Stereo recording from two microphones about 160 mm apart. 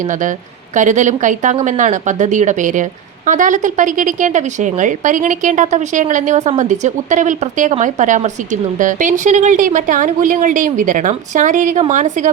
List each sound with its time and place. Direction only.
0.0 s speech: 55° right (ahead or behind)